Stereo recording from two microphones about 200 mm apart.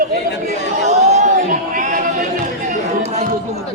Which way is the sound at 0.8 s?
35° right (ahead or behind).